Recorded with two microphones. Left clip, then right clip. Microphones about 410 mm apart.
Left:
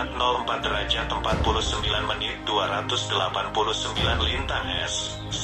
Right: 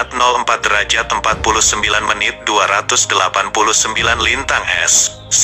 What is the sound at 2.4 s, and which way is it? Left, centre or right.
Speech, right.